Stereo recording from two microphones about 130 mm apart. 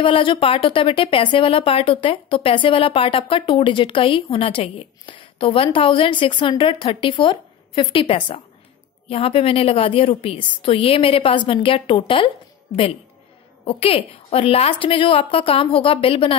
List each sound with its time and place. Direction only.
0.0 s a woman's voice: 40° left (ahead or behind)
13.7 s a woman's voice: 50° left (ahead or behind)